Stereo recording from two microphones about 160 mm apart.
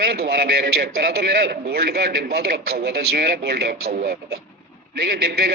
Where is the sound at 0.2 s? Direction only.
75° right (ahead or behind).